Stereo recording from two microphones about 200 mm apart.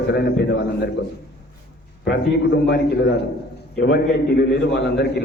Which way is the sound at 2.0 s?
60° left (ahead or behind).